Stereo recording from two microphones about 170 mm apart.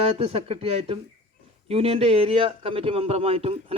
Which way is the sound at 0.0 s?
35° right (ahead or behind).